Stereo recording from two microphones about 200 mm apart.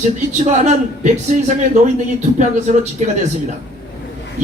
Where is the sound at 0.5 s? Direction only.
35° right (ahead or behind).